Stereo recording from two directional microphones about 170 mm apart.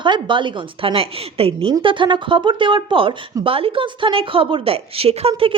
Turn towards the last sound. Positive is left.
turn(degrees=-30)  # may be behind; listen again after turning